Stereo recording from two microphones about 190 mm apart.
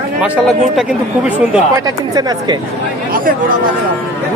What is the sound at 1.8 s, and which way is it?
Speech, 20° right (ahead or behind).